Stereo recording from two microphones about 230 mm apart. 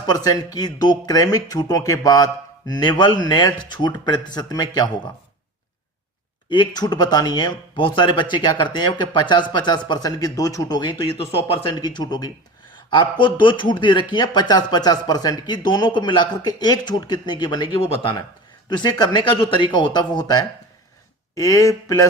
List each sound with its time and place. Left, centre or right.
0.0 s speech: centre
6.5 s speech: centre